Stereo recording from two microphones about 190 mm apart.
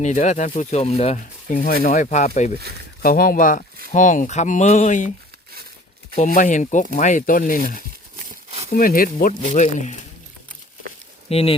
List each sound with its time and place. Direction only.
0.0 s speech: 40° left (ahead or behind)
3.0 s speech: 50° left (ahead or behind)
6.1 s speech: 40° left (ahead or behind)
8.1 s a sound: 30° right (ahead or behind)
8.7 s speech: 50° left (ahead or behind)
11.3 s speech: 30° left (ahead or behind)